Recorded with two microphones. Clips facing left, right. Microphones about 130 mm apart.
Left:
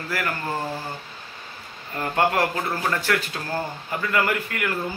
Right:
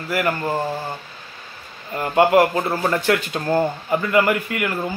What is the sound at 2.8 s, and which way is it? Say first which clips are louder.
A man's voice: right 4 dB; 20° right (ahead or behind).